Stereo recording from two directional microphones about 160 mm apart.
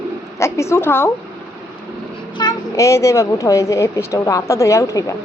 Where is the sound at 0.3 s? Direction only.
15° left (ahead or behind).